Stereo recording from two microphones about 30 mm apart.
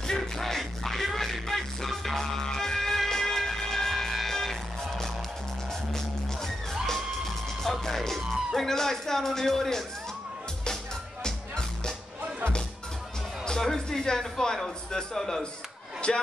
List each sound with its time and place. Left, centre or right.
0.0 s music: centre
3.1 s emergency vehicle: centre
4.3 s music: centre
7.8 s music: centre
11.2 s music: left
13.6 s music: centre
16.0 s speech: left